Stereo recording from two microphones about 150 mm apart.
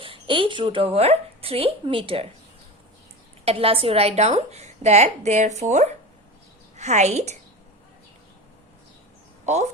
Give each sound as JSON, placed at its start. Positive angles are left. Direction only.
{"t": 0.0, "sound": "a woman's voice", "side_deg": -35}
{"t": 3.4, "sound": "a woman's voice", "side_deg": -40}